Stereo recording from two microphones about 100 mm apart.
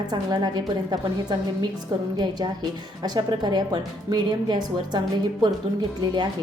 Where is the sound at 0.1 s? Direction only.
45° right (ahead or behind).